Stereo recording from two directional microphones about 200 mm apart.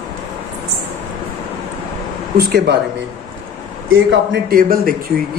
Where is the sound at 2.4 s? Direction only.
50° right (ahead or behind).